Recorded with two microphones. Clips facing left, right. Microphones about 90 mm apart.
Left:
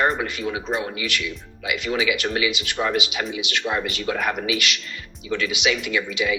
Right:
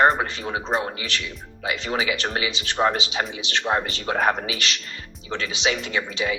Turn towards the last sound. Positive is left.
turn(degrees=-35)  # may be behind; listen again after turning